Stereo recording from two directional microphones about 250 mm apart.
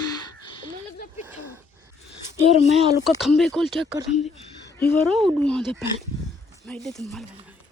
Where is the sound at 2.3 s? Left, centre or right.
Right.